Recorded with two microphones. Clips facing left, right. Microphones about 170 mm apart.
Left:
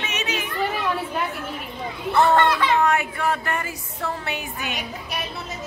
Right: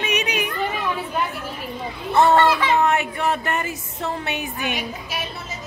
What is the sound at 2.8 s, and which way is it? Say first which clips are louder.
Music: right 1 dB; 20° right (ahead or behind).